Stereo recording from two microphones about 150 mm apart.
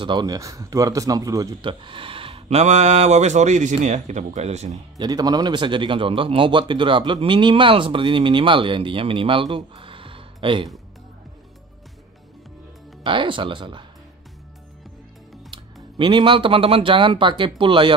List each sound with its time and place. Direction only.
0.0 s a man's voice: 30° right (ahead or behind); by 4.7 s 50° right (ahead or behind)
4.9 s a man's voice: 25° right (ahead or behind)
13.0 s a man's voice: 35° right (ahead or behind)
15.5 s speech: 30° right (ahead or behind)